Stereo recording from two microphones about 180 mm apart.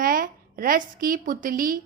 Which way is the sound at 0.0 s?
50° right (ahead or behind).